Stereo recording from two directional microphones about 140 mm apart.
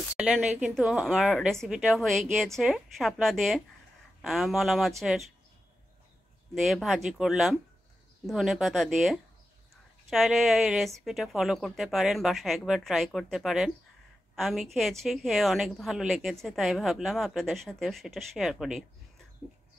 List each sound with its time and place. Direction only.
0.2 s a woman's voice: 10° right (ahead or behind)
6.5 s a woman's voice: centre (ahead or behind)